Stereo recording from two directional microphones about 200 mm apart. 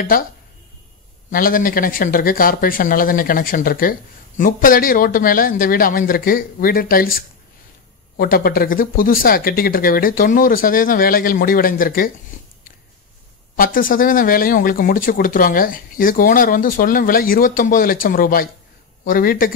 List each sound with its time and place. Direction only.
0.0 s speech: 45° left (ahead or behind)
1.3 s speech: 45° left (ahead or behind)
13.6 s speech: 45° left (ahead or behind)